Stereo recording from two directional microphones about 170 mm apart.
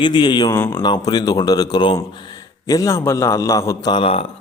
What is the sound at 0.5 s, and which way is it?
Speech, 15° left (ahead or behind).